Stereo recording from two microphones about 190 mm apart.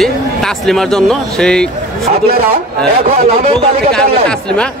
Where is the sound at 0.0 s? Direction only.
Centre (ahead or behind).